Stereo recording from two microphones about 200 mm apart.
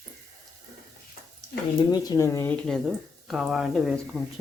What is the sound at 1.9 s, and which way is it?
Speech, 20° left (ahead or behind).